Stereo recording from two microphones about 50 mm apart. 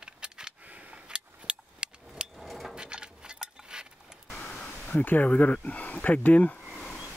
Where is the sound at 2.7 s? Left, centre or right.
Centre.